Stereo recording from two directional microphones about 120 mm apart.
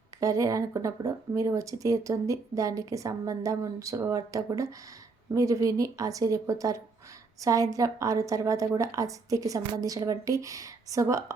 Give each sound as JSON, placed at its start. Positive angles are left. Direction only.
{"t": 0.2, "sound": "speech", "side_deg": -25}